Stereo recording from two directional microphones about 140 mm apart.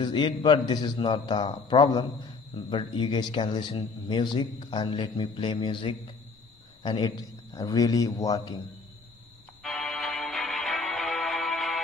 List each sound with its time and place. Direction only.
0.0 s a man's voice: 30° left (ahead or behind)
9.6 s music: centre (ahead or behind)